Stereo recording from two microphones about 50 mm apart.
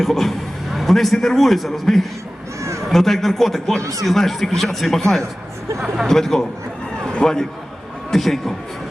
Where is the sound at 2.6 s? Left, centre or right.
Right.